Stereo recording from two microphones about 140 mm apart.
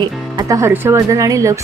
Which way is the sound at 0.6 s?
20° right (ahead or behind).